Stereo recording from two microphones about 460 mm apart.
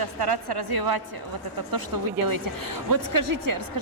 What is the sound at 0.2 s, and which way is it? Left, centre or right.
Speech, right.